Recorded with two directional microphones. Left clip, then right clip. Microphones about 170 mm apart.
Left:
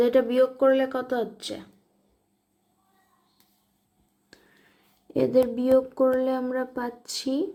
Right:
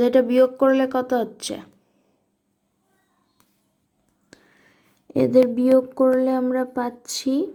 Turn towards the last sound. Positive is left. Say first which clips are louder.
# right 4 dB
turn(degrees=-15)  # may be behind; listen again after turning